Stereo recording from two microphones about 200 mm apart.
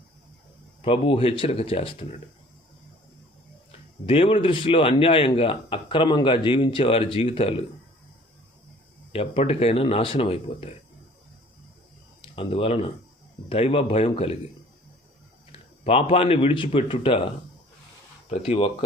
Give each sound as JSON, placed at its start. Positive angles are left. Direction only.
{"t": 0.8, "sound": "speech", "side_deg": 25}
{"t": 3.7, "sound": "speech", "side_deg": 30}
{"t": 9.1, "sound": "speech", "side_deg": 30}
{"t": 12.2, "sound": "speech", "side_deg": 25}
{"t": 15.8, "sound": "speech", "side_deg": 30}
{"t": 18.3, "sound": "speech", "side_deg": 30}